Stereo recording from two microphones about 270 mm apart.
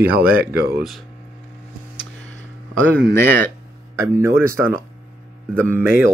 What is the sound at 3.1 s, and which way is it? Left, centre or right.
Speech, centre.